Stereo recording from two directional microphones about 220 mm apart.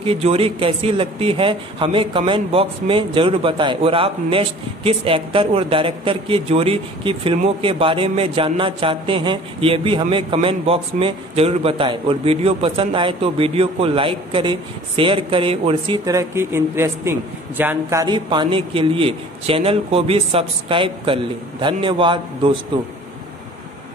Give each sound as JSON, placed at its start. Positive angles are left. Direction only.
{"t": 0.0, "sound": "speech", "side_deg": -25}